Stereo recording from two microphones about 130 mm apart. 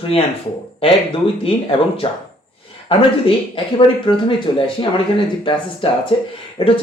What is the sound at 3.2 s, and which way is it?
Speech, 40° left (ahead or behind).